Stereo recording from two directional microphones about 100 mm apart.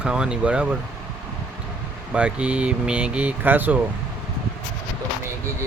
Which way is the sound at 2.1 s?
10° right (ahead or behind).